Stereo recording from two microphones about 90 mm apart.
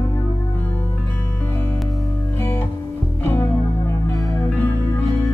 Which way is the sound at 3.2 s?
25° left (ahead or behind).